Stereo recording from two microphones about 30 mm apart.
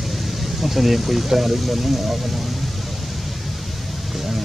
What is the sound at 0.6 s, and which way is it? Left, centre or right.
Speech, centre.